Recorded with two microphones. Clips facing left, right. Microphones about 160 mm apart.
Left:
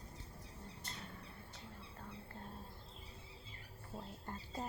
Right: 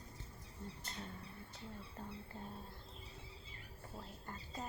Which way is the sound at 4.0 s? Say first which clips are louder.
Left 3 dB; 30° left (ahead or behind).